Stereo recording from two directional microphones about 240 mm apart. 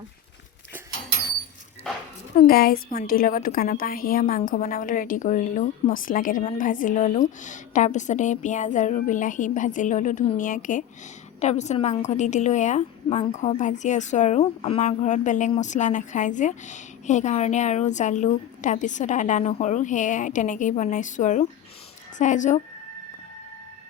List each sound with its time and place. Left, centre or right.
2.3 s a woman's voice: left